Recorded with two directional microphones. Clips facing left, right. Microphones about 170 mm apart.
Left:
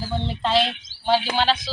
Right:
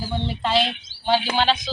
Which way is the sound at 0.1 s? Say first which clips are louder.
Left 1 dB; centre (ahead or behind).